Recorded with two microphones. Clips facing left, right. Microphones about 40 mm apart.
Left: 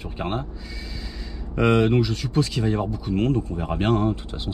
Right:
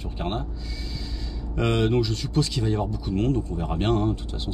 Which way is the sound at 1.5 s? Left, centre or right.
Left.